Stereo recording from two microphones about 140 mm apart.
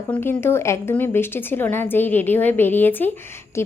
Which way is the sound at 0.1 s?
15° left (ahead or behind).